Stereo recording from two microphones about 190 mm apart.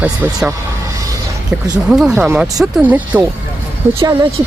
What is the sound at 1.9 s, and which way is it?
Speech, 5° right (ahead or behind).